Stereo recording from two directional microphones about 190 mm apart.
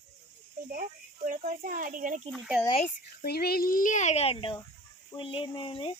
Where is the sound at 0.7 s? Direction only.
45° right (ahead or behind).